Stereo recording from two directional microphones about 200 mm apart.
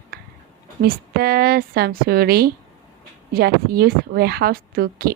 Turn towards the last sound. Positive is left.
turn(degrees=-50)  # may be behind; listen again after turning